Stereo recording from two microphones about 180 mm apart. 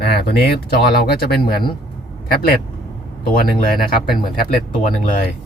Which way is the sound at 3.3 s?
55° left (ahead or behind).